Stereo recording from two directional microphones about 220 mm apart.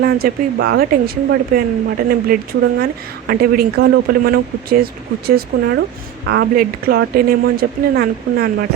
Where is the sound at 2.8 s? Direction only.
45° right (ahead or behind).